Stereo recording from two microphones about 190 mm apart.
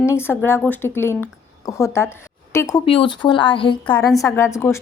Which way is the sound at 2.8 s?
25° left (ahead or behind).